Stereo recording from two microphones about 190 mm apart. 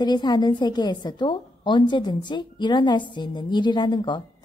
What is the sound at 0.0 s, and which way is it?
Speech, 20° left (ahead or behind).